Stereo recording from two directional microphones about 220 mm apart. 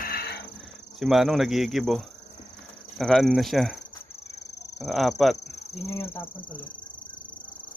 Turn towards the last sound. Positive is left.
turn(degrees=20)  # may be behind; listen again after turning